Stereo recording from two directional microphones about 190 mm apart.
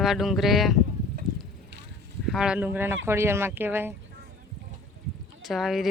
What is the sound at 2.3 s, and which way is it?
Speech, 5° right (ahead or behind).